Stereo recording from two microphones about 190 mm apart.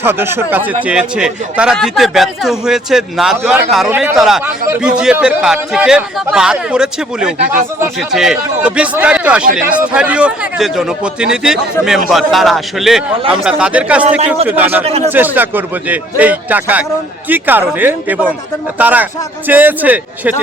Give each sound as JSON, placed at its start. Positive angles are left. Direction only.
{"t": 0.0, "sound": "a man's voice", "side_deg": -10}
{"t": 14.8, "sound": "speech", "side_deg": -35}
{"t": 15.1, "sound": "a man's voice", "side_deg": -10}